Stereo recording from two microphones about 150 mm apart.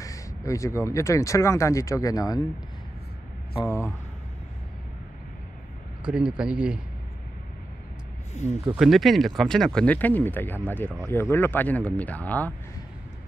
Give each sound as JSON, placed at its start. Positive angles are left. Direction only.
{"t": 0.0, "sound": "speech", "side_deg": 20}
{"t": 6.0, "sound": "speech", "side_deg": -5}
{"t": 8.6, "sound": "speech", "side_deg": 0}